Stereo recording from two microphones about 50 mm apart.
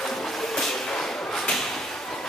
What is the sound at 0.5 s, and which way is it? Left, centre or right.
Train, centre.